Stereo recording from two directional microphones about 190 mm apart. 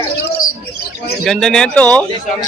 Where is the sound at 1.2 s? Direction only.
Centre (ahead or behind).